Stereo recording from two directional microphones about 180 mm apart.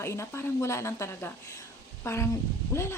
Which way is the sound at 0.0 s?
15° left (ahead or behind).